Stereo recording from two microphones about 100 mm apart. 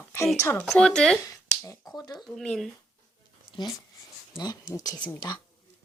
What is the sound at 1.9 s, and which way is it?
Speech, 40° left (ahead or behind).